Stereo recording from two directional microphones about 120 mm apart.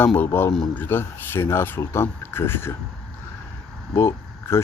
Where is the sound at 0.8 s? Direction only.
20° left (ahead or behind).